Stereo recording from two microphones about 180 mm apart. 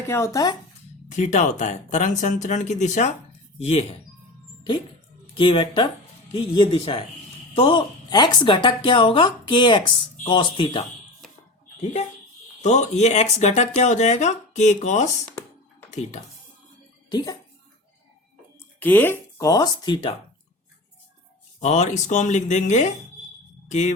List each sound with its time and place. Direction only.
0.1 s speech: 15° left (ahead or behind)
1.1 s speech: 40° left (ahead or behind)
5.4 s speech: 25° left (ahead or behind)
12.6 s speech: 40° left (ahead or behind)
17.1 s speech: 20° left (ahead or behind)
18.8 s speech: 10° left (ahead or behind); by 20.1 s 25° left (ahead or behind)
21.6 s speech: 40° left (ahead or behind)